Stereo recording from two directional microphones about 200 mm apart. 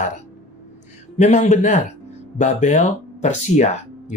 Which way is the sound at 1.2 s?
35° left (ahead or behind).